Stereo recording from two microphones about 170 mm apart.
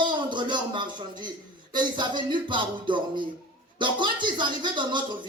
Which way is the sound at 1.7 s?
25° right (ahead or behind).